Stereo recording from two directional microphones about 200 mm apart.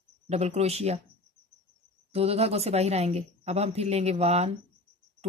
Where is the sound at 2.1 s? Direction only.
30° right (ahead or behind).